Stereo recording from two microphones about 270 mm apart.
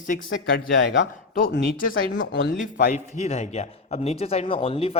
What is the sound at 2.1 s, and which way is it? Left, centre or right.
Speech, left.